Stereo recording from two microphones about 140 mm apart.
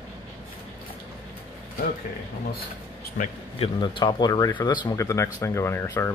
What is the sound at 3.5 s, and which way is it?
Speech, 40° left (ahead or behind).